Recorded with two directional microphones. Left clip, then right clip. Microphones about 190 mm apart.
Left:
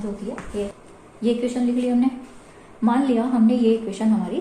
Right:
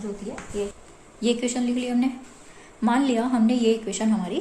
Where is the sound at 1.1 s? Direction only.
55° right (ahead or behind).